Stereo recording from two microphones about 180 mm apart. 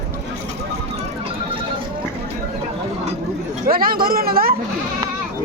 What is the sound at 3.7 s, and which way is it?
Speech, 55° right (ahead or behind).